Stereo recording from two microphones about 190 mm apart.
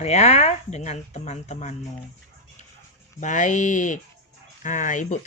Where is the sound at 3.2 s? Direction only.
40° left (ahead or behind).